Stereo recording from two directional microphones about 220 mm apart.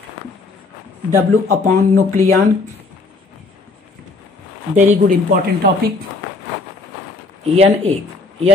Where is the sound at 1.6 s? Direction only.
35° right (ahead or behind).